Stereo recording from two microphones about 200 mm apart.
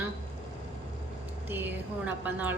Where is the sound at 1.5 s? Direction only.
10° right (ahead or behind).